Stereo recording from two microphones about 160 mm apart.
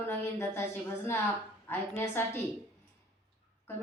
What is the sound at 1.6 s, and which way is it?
Speech, 15° left (ahead or behind).